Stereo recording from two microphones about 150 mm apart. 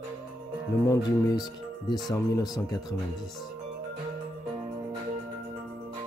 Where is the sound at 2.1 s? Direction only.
20° left (ahead or behind).